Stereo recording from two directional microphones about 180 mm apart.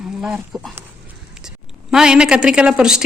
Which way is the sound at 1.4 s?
5° right (ahead or behind).